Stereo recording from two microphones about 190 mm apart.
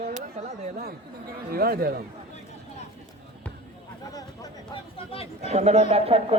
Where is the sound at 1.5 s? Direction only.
55° right (ahead or behind).